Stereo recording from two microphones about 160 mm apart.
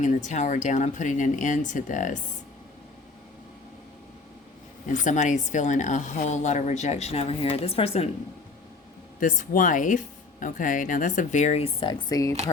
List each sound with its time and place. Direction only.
0.0 s a woman's voice: 50° left (ahead or behind)
4.9 s a woman's voice: 50° left (ahead or behind)
9.2 s a woman's voice: 55° left (ahead or behind); by 12.3 s 25° left (ahead or behind)